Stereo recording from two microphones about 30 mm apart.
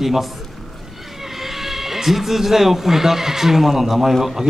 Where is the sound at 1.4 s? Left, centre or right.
Centre.